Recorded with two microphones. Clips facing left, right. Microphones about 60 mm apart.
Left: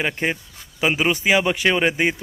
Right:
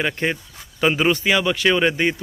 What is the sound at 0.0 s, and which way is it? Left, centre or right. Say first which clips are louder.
A man's voice: right 1 dB; centre.